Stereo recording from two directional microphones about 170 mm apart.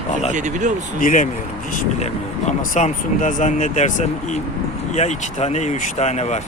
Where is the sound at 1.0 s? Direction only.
50° left (ahead or behind).